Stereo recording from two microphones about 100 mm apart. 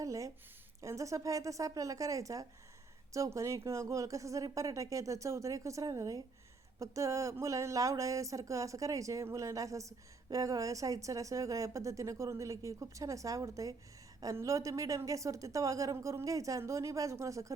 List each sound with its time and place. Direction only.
0.0 s a woman's voice: 35° right (ahead or behind)